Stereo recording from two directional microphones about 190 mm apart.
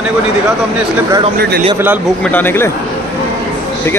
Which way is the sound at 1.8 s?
10° right (ahead or behind).